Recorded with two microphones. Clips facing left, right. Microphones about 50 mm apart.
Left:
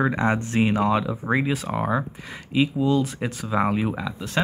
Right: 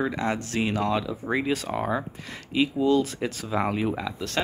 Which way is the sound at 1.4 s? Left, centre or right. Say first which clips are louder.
Left 2 dB; centre.